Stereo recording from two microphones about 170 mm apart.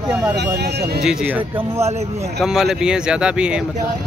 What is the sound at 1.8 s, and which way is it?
Speech, 40° right (ahead or behind).